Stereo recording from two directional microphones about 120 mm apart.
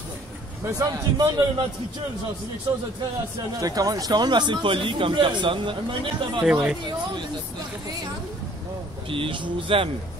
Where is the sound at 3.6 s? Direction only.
30° right (ahead or behind).